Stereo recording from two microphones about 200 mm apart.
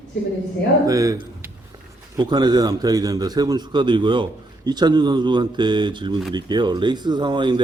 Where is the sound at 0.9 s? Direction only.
15° right (ahead or behind).